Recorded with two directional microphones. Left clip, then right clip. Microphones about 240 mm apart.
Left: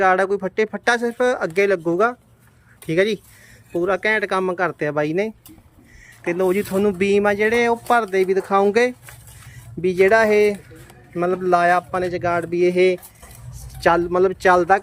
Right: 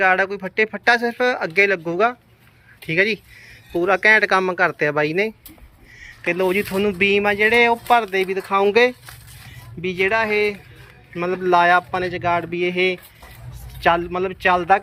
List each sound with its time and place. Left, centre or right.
0.0 s speech: centre